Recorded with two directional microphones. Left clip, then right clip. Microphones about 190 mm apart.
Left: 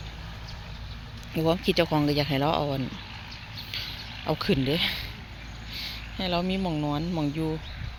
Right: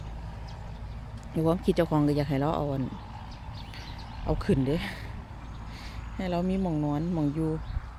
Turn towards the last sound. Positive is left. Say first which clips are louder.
# even
turn(degrees=-5)  # may be behind; listen again after turning